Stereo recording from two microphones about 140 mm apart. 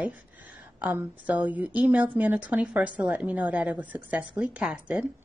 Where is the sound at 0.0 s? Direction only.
10° right (ahead or behind).